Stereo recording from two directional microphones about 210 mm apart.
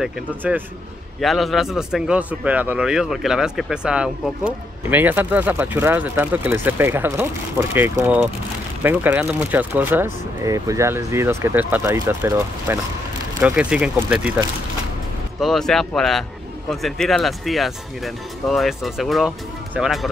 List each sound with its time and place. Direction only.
0.0 s speech: 5° right (ahead or behind)
15.4 s speech: centre (ahead or behind)